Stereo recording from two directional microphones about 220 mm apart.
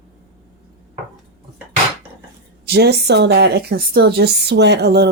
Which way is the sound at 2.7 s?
45° right (ahead or behind).